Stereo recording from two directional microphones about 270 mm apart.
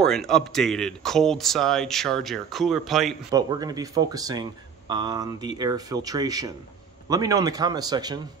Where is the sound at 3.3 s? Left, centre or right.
Centre.